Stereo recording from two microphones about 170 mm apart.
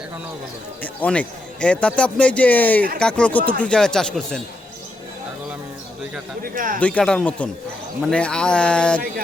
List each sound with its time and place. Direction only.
0.8 s a man's voice: 10° left (ahead or behind)
6.4 s speech: 55° right (ahead or behind)
6.7 s a man's voice: 10° left (ahead or behind)